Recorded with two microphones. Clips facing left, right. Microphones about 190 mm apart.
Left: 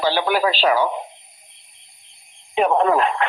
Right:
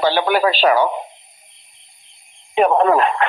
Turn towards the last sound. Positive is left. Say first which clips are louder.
# right 3 dB
turn(degrees=-60)  # may be behind; listen again after turning